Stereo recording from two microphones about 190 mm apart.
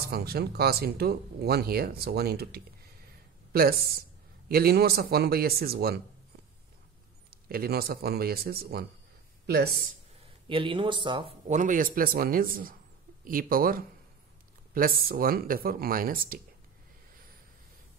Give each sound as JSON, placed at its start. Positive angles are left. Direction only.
{"t": 0.0, "sound": "speech", "side_deg": -55}
{"t": 7.2, "sound": "speech", "side_deg": -50}
{"t": 10.5, "sound": "speech", "side_deg": -25}
{"t": 11.4, "sound": "speech", "side_deg": -40}